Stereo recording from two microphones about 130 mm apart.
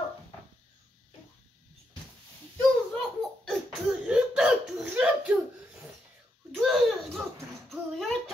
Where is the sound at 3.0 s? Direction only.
Centre (ahead or behind).